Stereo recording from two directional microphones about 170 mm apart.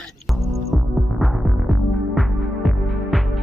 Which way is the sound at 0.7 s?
Centre (ahead or behind).